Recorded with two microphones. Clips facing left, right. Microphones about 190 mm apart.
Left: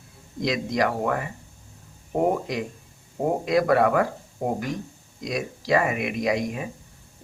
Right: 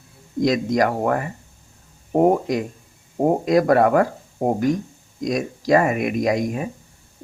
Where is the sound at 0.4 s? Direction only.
45° right (ahead or behind).